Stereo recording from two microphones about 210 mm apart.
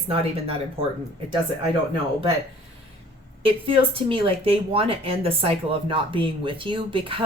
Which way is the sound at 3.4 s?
25° right (ahead or behind).